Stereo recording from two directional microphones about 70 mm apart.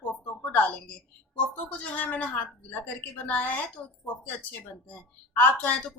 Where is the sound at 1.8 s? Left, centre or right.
Left.